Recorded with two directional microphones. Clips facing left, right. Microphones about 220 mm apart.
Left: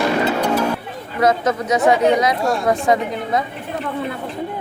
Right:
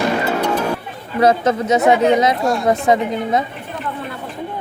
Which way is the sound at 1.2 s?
30° right (ahead or behind).